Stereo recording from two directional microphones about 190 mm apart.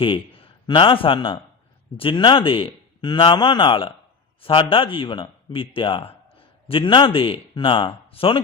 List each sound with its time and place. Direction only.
0.0 s a man's voice: 25° left (ahead or behind)